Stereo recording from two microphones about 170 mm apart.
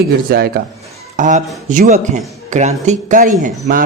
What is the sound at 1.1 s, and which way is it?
Speech, 45° right (ahead or behind).